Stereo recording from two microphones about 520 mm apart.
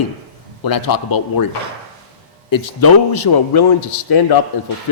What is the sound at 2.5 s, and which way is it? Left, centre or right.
Speech, left.